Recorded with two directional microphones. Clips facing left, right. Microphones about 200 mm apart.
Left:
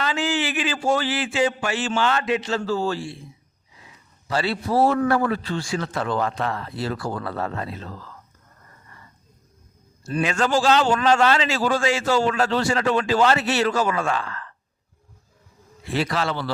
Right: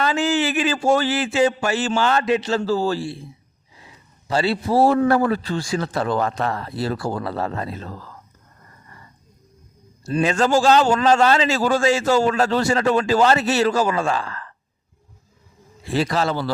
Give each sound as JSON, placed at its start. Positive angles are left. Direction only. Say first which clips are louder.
{"t": 0.0, "sound": "a man's voice", "louder": "right 4 dB", "side_deg": -45}
{"t": 4.3, "sound": "a man's voice", "louder": "right 3 dB", "side_deg": -30}
{"t": 10.0, "sound": "a man's voice", "louder": "right 4 dB", "side_deg": -30}
{"t": 15.9, "sound": "a man's voice", "louder": "right 3 dB", "side_deg": -40}